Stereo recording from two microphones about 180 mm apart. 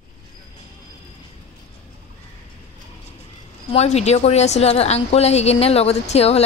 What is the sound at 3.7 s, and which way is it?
A woman's voice, 35° left (ahead or behind).